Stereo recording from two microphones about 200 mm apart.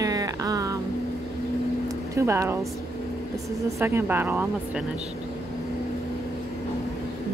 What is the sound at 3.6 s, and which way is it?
Speech, 15° right (ahead or behind).